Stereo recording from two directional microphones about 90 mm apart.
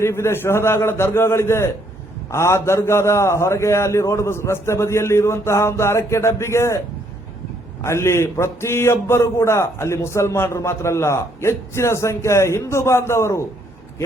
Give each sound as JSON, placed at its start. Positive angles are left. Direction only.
{"t": 0.0, "sound": "a man's voice", "side_deg": 30}